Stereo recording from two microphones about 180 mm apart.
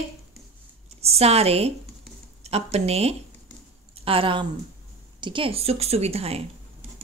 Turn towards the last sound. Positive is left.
turn(degrees=-35)  # may be behind; listen again after turning